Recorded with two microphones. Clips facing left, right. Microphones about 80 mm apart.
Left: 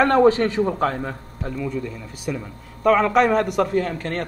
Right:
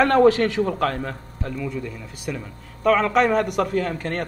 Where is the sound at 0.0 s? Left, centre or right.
Centre.